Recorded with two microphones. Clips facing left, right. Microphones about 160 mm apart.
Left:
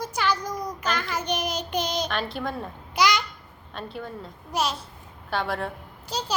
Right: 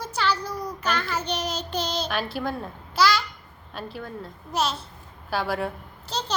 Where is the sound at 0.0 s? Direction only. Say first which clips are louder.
Even; 10° left (ahead or behind).